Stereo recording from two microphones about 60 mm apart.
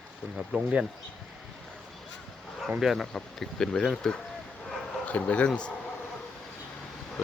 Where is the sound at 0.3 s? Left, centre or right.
Centre.